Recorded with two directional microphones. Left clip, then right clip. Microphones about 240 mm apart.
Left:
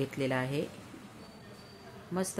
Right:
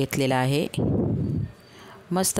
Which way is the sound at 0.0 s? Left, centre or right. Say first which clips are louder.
Right 9 dB; right.